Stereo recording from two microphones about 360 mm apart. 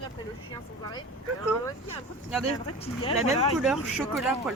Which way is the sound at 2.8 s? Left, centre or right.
Centre.